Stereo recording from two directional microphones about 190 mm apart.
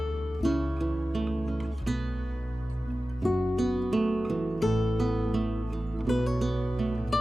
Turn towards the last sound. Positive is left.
turn(degrees=0)  # may be behind; listen again after turning